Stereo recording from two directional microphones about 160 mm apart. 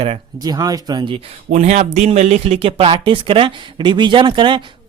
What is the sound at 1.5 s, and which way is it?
Speech, 45° right (ahead or behind).